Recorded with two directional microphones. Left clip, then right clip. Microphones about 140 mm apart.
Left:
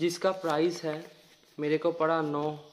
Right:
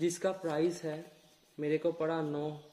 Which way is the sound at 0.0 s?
20° right (ahead or behind).